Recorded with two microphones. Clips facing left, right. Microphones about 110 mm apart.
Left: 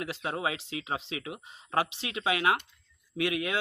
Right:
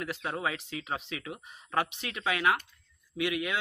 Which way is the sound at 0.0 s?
20° left (ahead or behind).